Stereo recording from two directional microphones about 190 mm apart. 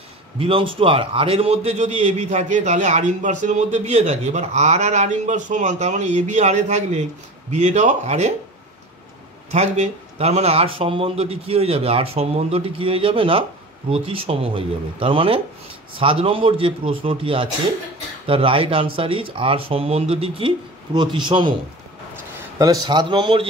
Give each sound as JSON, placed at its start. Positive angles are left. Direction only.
{"t": 0.4, "sound": "a man's voice", "side_deg": -30}
{"t": 9.5, "sound": "speech", "side_deg": -35}
{"t": 22.6, "sound": "speech", "side_deg": -20}